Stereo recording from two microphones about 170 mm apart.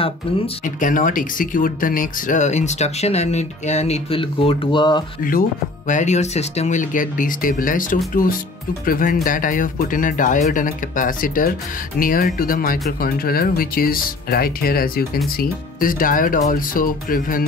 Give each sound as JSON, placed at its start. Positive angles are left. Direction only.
{"t": 0.7, "sound": "speech", "side_deg": 50}
{"t": 5.9, "sound": "speech", "side_deg": 45}